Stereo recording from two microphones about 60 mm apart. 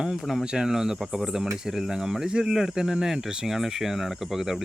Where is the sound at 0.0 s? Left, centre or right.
Centre.